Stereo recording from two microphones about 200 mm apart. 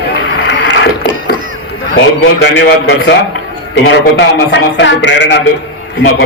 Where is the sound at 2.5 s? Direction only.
65° left (ahead or behind).